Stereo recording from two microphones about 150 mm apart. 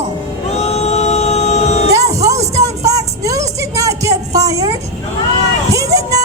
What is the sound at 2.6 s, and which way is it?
Music, 20° right (ahead or behind).